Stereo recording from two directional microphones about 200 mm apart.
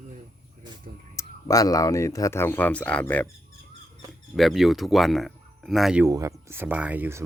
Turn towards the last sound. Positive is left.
turn(degrees=-10)  # may be behind; listen again after turning